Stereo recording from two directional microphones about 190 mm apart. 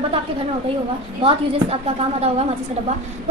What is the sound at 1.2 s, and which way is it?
A woman's voice, 30° right (ahead or behind).